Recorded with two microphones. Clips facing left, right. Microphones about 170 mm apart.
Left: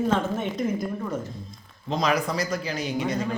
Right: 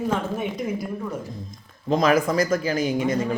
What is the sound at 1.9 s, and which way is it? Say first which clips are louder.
Speech: right 5 dB; 50° right (ahead or behind).